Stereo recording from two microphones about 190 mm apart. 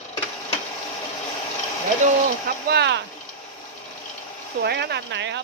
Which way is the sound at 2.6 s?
60° right (ahead or behind).